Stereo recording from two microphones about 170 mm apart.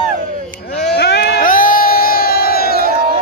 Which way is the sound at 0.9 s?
70° left (ahead or behind).